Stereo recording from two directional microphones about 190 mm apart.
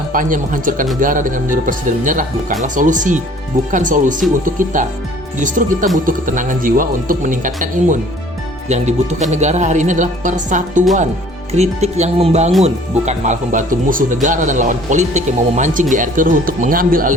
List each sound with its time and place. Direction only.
0.1 s speech: 45° right (ahead or behind)